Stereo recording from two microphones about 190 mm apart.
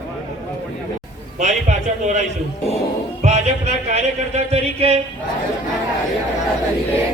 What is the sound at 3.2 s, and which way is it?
Music, 35° right (ahead or behind).